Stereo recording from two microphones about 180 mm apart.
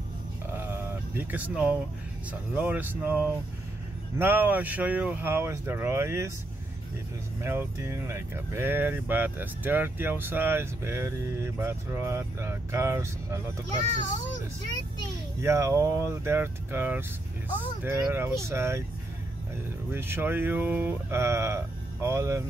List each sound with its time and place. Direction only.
0.5 s a sound: 10° right (ahead or behind)
2.5 s speech: 10° right (ahead or behind)
7.4 s speech: 15° right (ahead or behind)
15.4 s speech: 15° right (ahead or behind)
19.9 s speech: 10° right (ahead or behind)